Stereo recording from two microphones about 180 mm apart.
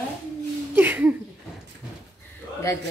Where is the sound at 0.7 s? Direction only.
10° right (ahead or behind).